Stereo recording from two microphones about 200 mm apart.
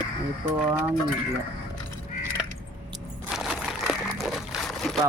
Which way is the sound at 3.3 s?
Centre (ahead or behind).